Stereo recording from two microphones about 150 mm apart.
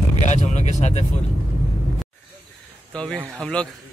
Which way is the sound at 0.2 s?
50° left (ahead or behind).